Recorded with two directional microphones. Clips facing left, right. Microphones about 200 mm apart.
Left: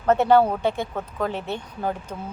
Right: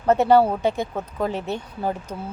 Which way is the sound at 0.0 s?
10° right (ahead or behind).